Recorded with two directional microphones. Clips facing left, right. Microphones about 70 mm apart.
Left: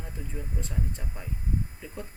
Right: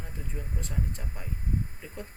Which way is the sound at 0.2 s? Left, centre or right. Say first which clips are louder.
Left 2 dB; centre.